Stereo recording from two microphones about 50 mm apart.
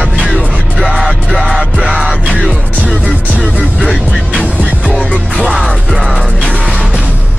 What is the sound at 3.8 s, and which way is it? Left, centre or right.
Music, centre.